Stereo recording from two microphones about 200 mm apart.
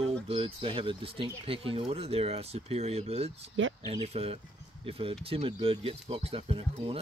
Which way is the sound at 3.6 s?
70° right (ahead or behind).